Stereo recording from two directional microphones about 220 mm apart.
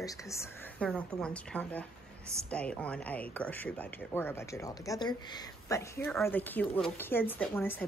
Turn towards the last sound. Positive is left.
turn(degrees=10)  # may be behind; listen again after turning